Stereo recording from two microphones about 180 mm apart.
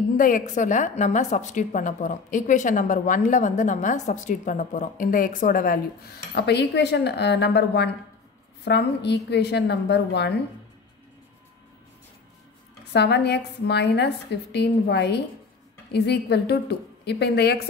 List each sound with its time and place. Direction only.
0.2 s a woman's voice: 45° left (ahead or behind); by 10.3 s 70° left (ahead or behind)
12.9 s a woman's voice: 70° left (ahead or behind)